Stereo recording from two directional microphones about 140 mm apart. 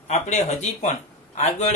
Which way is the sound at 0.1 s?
55° left (ahead or behind).